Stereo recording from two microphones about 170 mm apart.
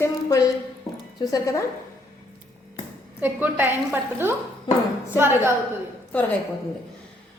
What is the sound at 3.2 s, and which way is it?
Speech, 10° right (ahead or behind).